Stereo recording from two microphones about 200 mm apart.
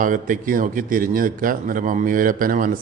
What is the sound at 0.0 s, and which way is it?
A man's voice, 40° right (ahead or behind).